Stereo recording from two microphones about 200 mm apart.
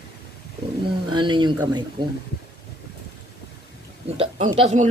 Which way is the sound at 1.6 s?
20° right (ahead or behind).